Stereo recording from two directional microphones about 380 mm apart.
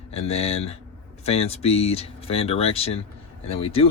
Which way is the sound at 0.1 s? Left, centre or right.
Centre.